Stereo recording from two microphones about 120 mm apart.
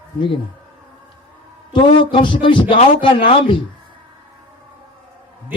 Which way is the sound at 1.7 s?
45° left (ahead or behind).